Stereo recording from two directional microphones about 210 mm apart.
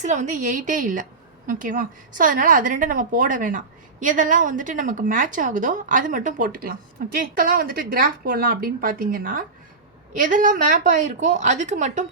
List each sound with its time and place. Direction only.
0.0 s a woman's voice: 35° right (ahead or behind)